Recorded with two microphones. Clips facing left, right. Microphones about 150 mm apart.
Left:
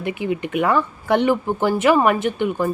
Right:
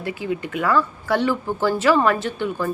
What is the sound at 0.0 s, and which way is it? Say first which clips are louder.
Speech: left 3 dB; 20° left (ahead or behind).